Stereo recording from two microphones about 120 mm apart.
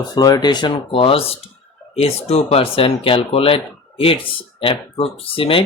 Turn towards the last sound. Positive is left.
turn(degrees=50)  # may be behind; listen again after turning